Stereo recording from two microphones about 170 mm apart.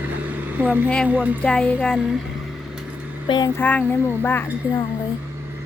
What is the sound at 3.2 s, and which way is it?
Speech, 25° left (ahead or behind).